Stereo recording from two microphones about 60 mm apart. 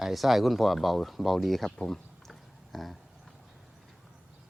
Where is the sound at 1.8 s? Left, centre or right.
Centre.